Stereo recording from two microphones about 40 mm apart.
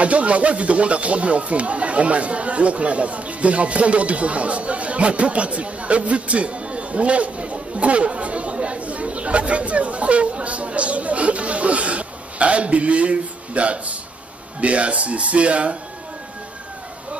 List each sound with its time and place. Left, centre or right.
0.0 s speech: right